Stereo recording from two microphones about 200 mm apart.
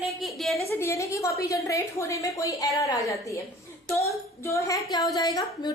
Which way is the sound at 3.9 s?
15° left (ahead or behind).